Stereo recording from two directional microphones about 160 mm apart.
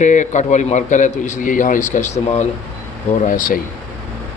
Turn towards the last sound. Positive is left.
turn(degrees=55)  # may be behind; listen again after turning